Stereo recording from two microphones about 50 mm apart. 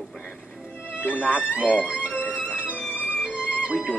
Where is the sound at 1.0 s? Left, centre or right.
Left.